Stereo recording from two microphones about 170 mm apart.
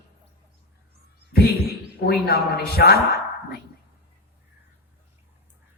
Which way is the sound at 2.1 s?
65° left (ahead or behind).